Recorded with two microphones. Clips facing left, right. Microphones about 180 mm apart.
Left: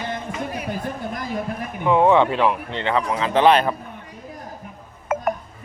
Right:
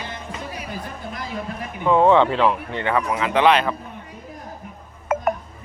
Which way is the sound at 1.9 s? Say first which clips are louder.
Right 1 dB; 15° left (ahead or behind).